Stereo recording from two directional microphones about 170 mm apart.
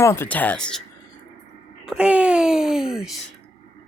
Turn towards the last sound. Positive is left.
turn(degrees=-5)  # may be behind; listen again after turning